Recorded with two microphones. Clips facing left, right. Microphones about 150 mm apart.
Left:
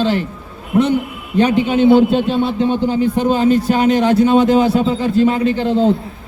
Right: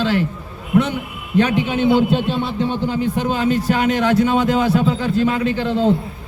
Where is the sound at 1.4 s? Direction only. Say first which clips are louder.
Left 4 dB; 30° left (ahead or behind).